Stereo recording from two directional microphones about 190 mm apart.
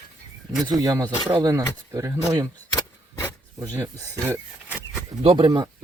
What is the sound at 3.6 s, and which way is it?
Speech, 15° right (ahead or behind).